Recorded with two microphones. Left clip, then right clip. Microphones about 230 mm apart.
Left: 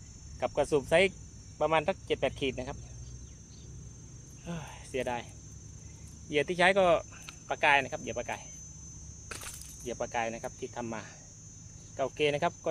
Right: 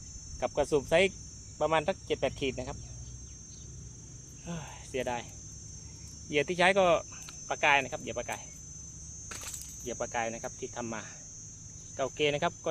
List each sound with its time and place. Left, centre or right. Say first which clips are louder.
0.3 s speech: even; centre
4.4 s speech: even; centre
6.2 s speech: even; centre
9.8 s speech: even; centre